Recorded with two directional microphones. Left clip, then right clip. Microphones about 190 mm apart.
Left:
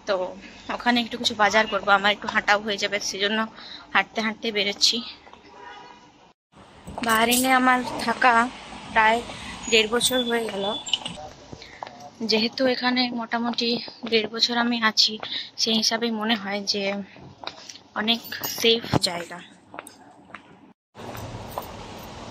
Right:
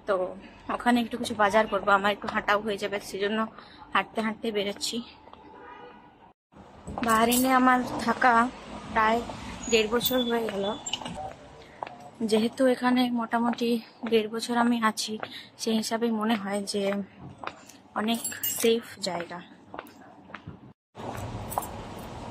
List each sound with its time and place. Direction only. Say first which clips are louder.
0.0 s speech: left 2 dB; 5° right (ahead or behind)
7.1 s speech: left 3 dB; 5° right (ahead or behind)
12.3 s a woman's voice: left 2 dB; 15° right (ahead or behind)